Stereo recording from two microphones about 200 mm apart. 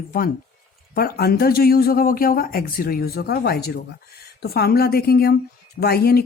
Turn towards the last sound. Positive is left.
turn(degrees=50)  # may be behind; listen again after turning